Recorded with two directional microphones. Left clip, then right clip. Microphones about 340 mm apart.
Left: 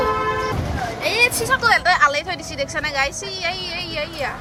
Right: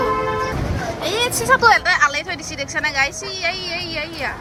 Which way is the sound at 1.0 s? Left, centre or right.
Centre.